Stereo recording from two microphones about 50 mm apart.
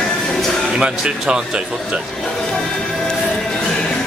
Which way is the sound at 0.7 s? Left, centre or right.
Centre.